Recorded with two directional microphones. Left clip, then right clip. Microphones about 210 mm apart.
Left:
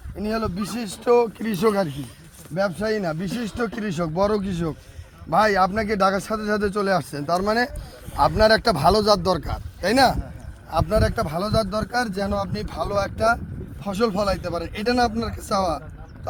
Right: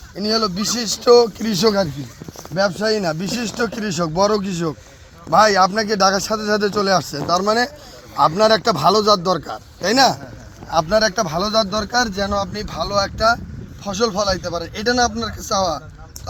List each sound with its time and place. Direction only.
0.2 s speech: 25° right (ahead or behind)
2.6 s a man's voice: 15° left (ahead or behind); by 10.2 s 40° left (ahead or behind)
10.7 s speech: 30° left (ahead or behind)